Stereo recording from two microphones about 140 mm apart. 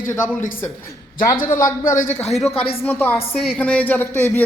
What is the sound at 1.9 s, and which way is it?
Speech, 60° left (ahead or behind).